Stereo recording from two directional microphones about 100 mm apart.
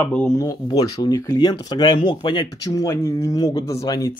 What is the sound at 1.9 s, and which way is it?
Speech, 55° left (ahead or behind).